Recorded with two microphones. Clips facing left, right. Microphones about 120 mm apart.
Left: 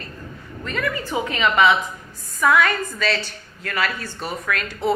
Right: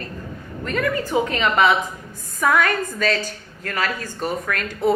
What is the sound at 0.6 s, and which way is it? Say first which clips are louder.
A woman's voice: right 3 dB; 45° right (ahead or behind).